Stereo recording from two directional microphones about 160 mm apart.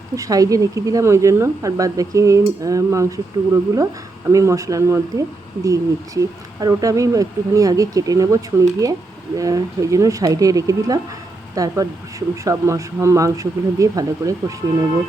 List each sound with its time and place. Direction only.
0.2 s speech: 20° right (ahead or behind)